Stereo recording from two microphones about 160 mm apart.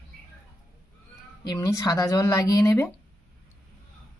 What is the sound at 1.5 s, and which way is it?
Speech, 20° left (ahead or behind).